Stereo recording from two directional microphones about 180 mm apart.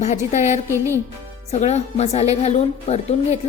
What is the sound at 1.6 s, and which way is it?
A woman's voice, 40° left (ahead or behind).